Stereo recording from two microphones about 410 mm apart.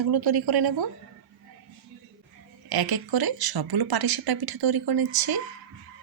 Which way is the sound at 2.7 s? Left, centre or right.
Right.